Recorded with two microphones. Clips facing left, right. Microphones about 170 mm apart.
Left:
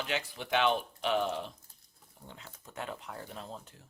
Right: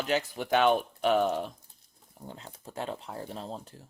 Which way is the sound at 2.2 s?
35° right (ahead or behind).